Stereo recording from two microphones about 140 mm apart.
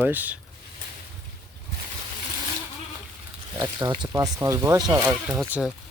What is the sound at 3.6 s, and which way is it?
Speech, 25° right (ahead or behind).